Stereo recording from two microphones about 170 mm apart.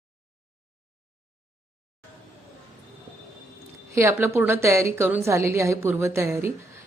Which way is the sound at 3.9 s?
15° right (ahead or behind).